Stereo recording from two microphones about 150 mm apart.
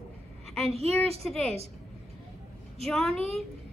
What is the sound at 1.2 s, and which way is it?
Speech, centre (ahead or behind).